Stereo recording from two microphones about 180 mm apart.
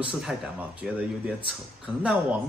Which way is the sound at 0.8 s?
5° right (ahead or behind).